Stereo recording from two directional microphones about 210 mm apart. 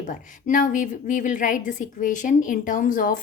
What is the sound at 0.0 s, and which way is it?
A woman's voice, 40° left (ahead or behind).